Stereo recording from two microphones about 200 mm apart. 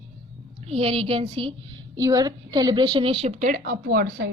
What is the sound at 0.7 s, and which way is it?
A woman's voice, 30° right (ahead or behind).